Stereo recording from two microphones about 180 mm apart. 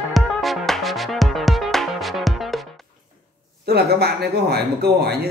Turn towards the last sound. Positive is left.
turn(degrees=-65)  # may be behind; listen again after turning